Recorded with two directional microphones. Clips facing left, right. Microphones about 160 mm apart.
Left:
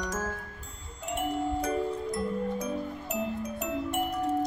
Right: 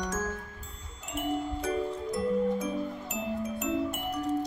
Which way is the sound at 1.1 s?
Centre (ahead or behind).